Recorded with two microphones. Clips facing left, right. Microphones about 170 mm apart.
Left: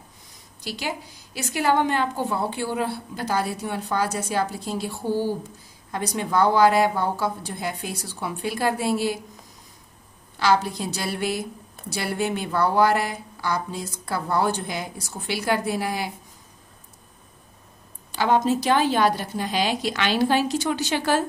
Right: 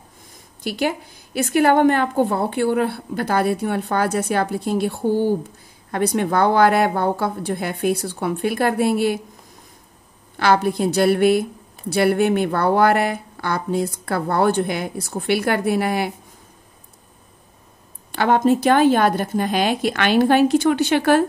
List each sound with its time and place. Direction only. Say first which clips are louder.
0.7 s a woman's voice: right 8 dB; 55° right (ahead or behind)
10.4 s a woman's voice: right 4 dB; 55° right (ahead or behind)
18.1 s a woman's voice: right 4 dB; 60° right (ahead or behind)